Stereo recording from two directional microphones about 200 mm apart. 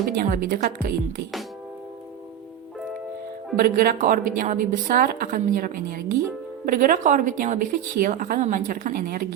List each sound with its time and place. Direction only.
0.0 s a woman's voice: 45° right (ahead or behind)
3.6 s a woman's voice: 45° right (ahead or behind)